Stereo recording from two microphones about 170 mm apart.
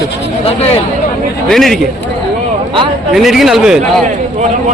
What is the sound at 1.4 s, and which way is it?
Speech, centre (ahead or behind).